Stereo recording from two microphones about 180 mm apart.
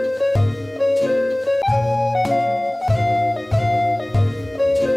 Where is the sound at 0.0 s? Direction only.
Centre (ahead or behind).